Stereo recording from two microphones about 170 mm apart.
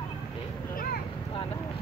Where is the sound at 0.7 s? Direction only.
55° left (ahead or behind).